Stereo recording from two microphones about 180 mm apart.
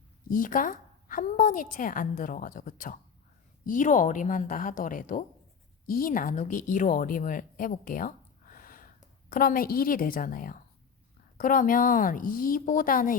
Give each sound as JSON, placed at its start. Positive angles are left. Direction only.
{"t": 0.3, "sound": "a woman's voice", "side_deg": 50}